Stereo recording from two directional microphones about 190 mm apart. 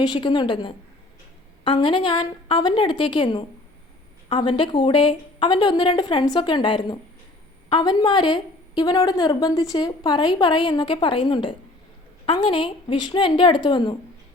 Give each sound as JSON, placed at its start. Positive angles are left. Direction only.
{"t": 0.0, "sound": "a woman's voice", "side_deg": 25}